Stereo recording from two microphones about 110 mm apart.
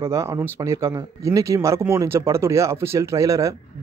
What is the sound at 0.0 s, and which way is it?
Speech, 25° right (ahead or behind).